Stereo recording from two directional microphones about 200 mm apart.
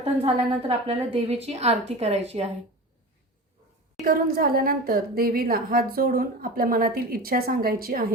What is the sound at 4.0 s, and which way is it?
A woman's voice, 45° right (ahead or behind).